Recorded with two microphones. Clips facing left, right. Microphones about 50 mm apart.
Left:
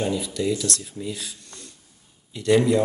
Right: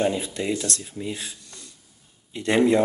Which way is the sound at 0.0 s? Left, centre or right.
Right.